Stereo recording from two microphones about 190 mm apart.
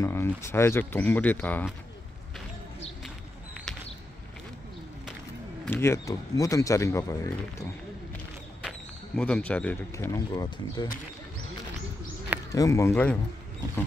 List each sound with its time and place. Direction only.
0.0 s speech: 15° left (ahead or behind)
5.7 s speech: 15° left (ahead or behind)
8.6 s speech: 5° left (ahead or behind); by 10.9 s 20° left (ahead or behind)
12.5 s speech: 15° left (ahead or behind)